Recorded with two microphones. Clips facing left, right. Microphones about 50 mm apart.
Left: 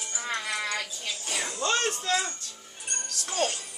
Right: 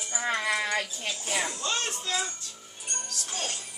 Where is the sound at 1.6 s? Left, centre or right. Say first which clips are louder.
Left 5 dB; left.